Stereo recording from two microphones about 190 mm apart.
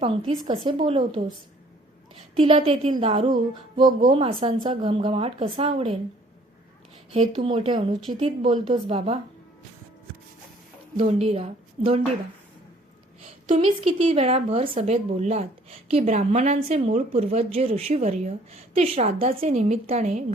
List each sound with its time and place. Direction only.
0.0 s speech: 30° right (ahead or behind)
2.3 s speech: 30° right (ahead or behind)
7.1 s speech: 35° right (ahead or behind)
10.9 s speech: 35° right (ahead or behind)
13.6 s speech: 30° right (ahead or behind)